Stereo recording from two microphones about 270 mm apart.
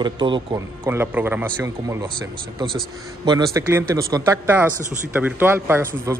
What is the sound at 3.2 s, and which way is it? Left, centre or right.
A man's voice, centre.